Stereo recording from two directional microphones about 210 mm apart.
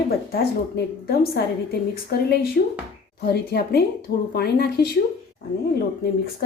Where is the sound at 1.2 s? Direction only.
50° left (ahead or behind).